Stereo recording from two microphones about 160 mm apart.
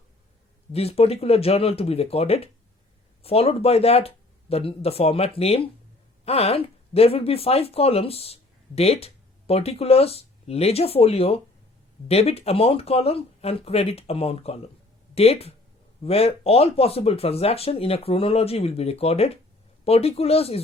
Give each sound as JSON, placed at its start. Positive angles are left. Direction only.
{"t": 0.7, "sound": "speech", "side_deg": 40}